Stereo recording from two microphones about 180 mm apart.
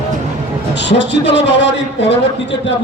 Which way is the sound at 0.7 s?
75° left (ahead or behind).